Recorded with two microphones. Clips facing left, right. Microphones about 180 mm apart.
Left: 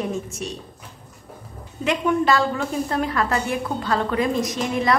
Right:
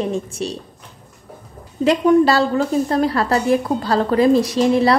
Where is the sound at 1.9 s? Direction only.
35° right (ahead or behind).